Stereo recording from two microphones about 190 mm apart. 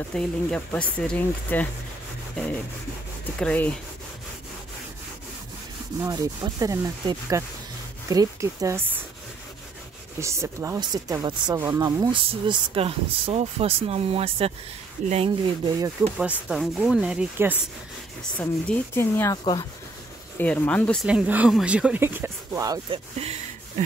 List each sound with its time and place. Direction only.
0.1 s speech: 5° left (ahead or behind)
3.3 s speech: 5° left (ahead or behind)
6.0 s speech: 20° right (ahead or behind)
10.2 s speech: 15° right (ahead or behind)
16.2 s speech: 5° right (ahead or behind)
18.4 s speech: 10° left (ahead or behind)
20.3 s speech: 10° left (ahead or behind); by 22.9 s 20° right (ahead or behind)
23.1 s speech: 35° right (ahead or behind)